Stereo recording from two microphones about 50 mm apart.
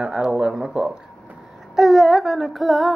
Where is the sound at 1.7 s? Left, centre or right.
Centre.